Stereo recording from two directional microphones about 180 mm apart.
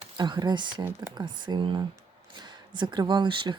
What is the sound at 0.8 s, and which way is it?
Speech, 15° right (ahead or behind).